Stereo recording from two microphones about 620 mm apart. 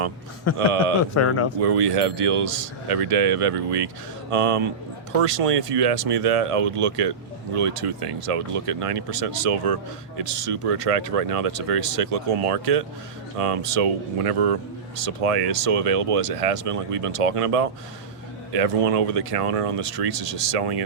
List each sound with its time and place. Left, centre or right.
0.5 s speech: left
1.6 s speech: right